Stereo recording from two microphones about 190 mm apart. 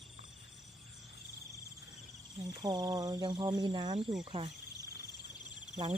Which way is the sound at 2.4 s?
20° right (ahead or behind).